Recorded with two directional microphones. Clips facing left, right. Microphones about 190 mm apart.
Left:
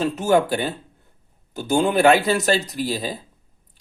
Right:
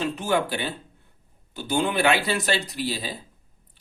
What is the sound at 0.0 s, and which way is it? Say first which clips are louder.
Speech: left 6 dB; 45° left (ahead or behind).